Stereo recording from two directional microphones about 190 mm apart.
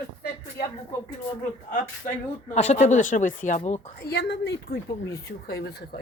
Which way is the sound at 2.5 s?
35° left (ahead or behind).